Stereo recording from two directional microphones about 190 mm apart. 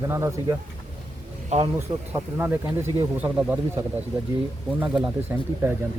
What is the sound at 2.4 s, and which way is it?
Speech, 10° right (ahead or behind).